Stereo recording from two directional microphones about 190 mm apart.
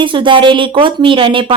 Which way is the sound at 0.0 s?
25° right (ahead or behind).